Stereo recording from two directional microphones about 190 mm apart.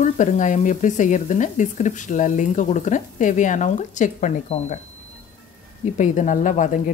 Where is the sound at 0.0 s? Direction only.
40° left (ahead or behind).